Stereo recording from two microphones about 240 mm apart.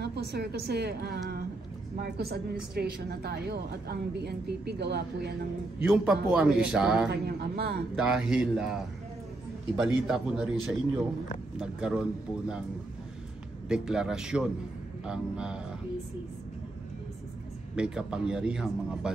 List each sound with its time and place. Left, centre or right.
0.0 s a woman's voice: right
5.8 s speech: centre
7.1 s a man's voice: right
7.9 s speech: centre
11.5 s speech: centre
13.7 s speech: centre
17.7 s speech: centre